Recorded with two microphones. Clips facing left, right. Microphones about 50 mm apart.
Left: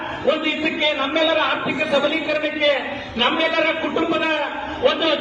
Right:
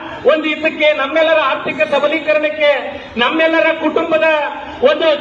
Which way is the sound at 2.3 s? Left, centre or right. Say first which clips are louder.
Right 7 dB; right.